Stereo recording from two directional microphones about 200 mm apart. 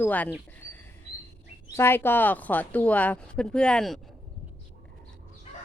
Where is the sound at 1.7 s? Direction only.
10° left (ahead or behind).